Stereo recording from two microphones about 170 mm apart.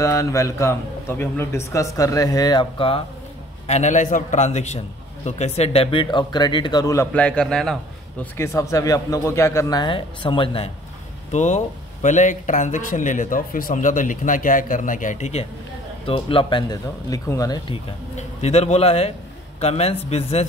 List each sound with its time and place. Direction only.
0.0 s a man's voice: 20° left (ahead or behind)
3.6 s a man's voice: 40° left (ahead or behind); by 7.1 s 20° left (ahead or behind)
7.2 s a man's voice: 5° left (ahead or behind)
8.4 s a man's voice: 20° left (ahead or behind)
11.3 s a man's voice: 45° left (ahead or behind); by 17.6 s 20° left (ahead or behind)
17.6 s a man's voice: 40° left (ahead or behind)